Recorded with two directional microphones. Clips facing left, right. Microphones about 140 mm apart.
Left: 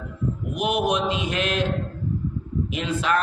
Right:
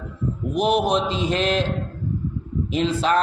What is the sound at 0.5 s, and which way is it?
A man's voice, 35° right (ahead or behind).